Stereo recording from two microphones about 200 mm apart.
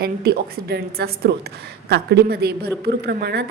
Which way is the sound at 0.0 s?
50° right (ahead or behind).